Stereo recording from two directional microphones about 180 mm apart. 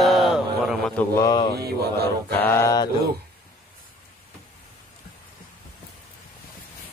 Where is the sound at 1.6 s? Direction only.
60° right (ahead or behind).